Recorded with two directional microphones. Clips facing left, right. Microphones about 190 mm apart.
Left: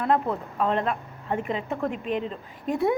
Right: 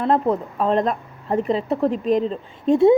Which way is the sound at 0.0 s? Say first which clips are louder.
Right 5 dB; 35° right (ahead or behind).